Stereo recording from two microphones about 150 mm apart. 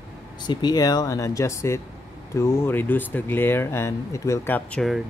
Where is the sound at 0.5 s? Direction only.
25° left (ahead or behind); by 5.0 s 5° left (ahead or behind).